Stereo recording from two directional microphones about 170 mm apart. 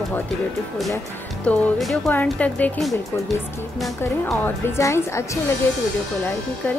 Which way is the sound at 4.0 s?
15° left (ahead or behind).